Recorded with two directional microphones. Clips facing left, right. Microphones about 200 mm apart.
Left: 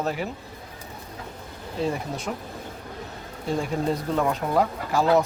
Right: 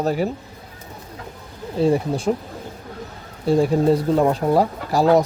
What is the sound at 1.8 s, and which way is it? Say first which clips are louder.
Speech: right 10 dB; 35° right (ahead or behind).